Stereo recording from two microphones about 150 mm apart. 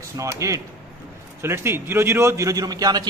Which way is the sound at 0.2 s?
20° right (ahead or behind).